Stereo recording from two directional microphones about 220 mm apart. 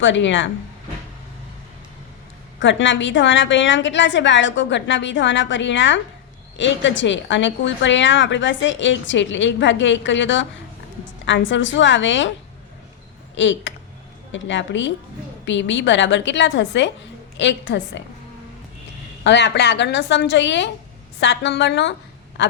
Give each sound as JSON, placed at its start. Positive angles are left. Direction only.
{"t": 0.0, "sound": "a woman's voice", "side_deg": 55}
{"t": 2.6, "sound": "a woman's voice", "side_deg": 55}
{"t": 13.3, "sound": "a woman's voice", "side_deg": 55}
{"t": 19.2, "sound": "a woman's voice", "side_deg": 50}
{"t": 22.4, "sound": "a sound", "side_deg": 55}